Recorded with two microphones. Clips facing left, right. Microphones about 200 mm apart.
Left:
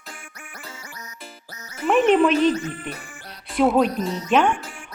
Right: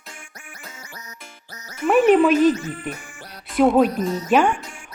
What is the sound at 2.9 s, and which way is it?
Speech, 10° right (ahead or behind).